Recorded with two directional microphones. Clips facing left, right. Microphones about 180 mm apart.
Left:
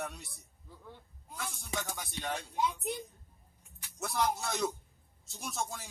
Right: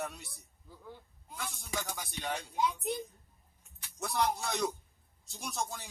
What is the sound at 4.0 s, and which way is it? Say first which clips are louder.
Speech: even; centre (ahead or behind).